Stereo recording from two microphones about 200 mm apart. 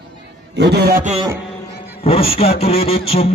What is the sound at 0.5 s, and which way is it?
Speech, 55° right (ahead or behind).